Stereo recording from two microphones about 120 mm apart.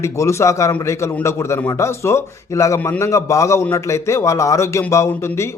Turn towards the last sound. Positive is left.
turn(degrees=20)  # may be behind; listen again after turning